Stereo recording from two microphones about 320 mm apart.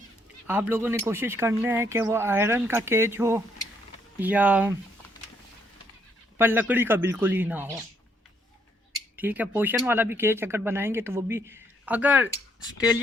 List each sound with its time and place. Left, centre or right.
0.4 s speech: centre
6.4 s speech: centre
9.1 s speech: centre